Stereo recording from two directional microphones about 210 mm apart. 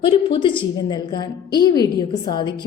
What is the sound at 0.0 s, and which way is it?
A woman's voice, 25° left (ahead or behind).